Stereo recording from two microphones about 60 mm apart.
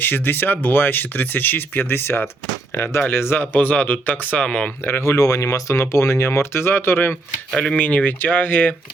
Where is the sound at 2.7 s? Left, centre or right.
Left.